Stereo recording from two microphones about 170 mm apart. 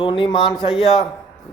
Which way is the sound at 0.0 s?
30° left (ahead or behind).